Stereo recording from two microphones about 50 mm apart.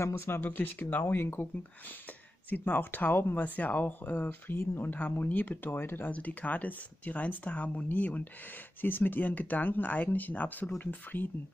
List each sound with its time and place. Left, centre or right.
0.0 s speech: left
0.5 s speech: left
1.0 s speech: left
3.3 s speech: left
4.0 s speech: left
6.0 s speech: left